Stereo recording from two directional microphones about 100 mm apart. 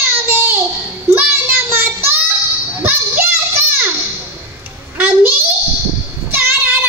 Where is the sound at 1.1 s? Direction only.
20° right (ahead or behind).